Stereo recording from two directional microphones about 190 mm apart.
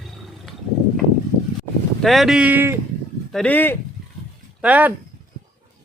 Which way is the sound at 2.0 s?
Centre (ahead or behind).